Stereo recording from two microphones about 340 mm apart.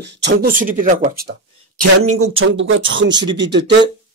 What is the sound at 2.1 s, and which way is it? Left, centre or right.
Speech, right.